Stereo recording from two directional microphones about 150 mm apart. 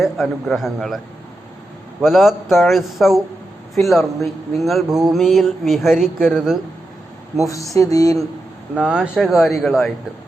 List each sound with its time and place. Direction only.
0.0 s speech: centre (ahead or behind)
7.8 s speech: 25° left (ahead or behind)
8.7 s speech: 5° right (ahead or behind)